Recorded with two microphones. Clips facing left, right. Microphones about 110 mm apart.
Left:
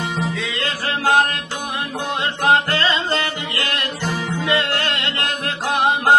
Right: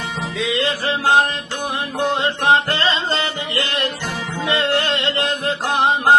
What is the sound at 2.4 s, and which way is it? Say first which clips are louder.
Music: left 1 dB; 25° right (ahead or behind).